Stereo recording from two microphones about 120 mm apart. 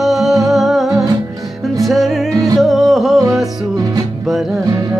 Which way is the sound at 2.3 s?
30° right (ahead or behind).